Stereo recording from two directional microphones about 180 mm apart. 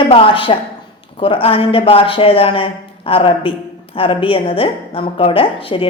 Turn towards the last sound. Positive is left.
turn(degrees=30)  # may be behind; listen again after turning